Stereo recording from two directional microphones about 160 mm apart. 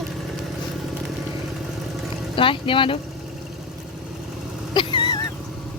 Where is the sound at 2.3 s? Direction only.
35° left (ahead or behind).